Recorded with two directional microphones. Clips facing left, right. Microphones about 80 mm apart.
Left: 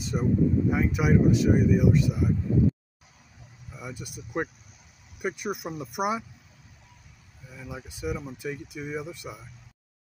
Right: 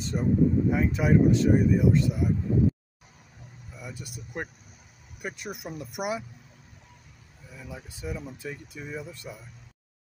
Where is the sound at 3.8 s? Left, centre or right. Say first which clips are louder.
Left 2 dB; left.